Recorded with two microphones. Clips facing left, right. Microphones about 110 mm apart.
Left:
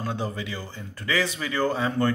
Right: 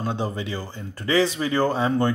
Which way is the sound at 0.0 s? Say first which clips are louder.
Right 3 dB; 25° right (ahead or behind).